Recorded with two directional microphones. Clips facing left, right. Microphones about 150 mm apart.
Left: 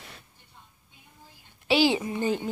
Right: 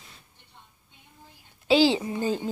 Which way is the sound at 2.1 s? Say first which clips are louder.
Even; 15° left (ahead or behind).